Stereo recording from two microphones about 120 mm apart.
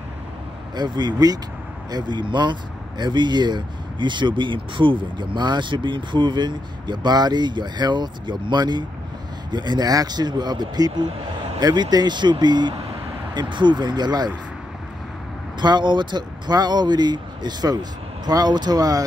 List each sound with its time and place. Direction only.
0.7 s speech: 40° right (ahead or behind)
15.6 s speech: 40° right (ahead or behind)